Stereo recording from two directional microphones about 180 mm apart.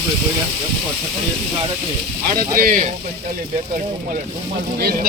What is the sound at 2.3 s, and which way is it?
Speech, 55° right (ahead or behind).